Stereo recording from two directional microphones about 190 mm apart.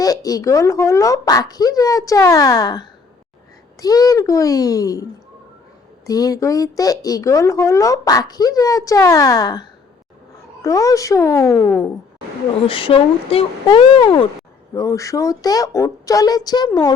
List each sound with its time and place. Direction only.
0.0 s speech: 20° left (ahead or behind)
6.1 s speech: 20° left (ahead or behind)
12.6 s speech: 30° left (ahead or behind)
14.7 s speech: 15° left (ahead or behind)